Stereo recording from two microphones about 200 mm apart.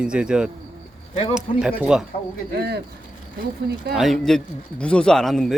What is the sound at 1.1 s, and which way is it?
Speech, 30° left (ahead or behind).